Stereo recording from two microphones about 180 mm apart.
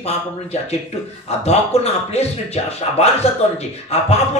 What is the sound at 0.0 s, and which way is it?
Speech, 35° left (ahead or behind).